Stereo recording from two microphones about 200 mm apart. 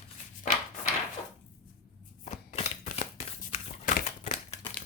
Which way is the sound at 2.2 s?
35° left (ahead or behind).